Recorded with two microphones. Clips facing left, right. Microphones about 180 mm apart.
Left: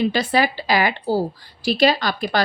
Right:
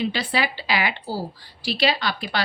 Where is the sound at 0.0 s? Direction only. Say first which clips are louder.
Left 6 dB; 45° left (ahead or behind).